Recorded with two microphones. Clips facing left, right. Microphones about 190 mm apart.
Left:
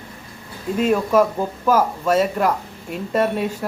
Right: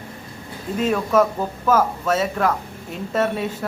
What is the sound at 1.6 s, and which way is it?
Speech, 10° left (ahead or behind).